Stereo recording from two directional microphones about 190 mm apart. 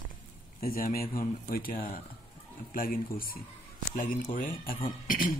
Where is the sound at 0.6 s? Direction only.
50° left (ahead or behind).